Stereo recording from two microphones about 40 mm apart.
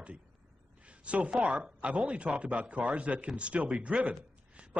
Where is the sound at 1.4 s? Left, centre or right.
Right.